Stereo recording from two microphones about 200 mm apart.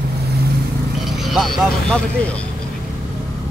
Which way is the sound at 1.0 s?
Centre (ahead or behind).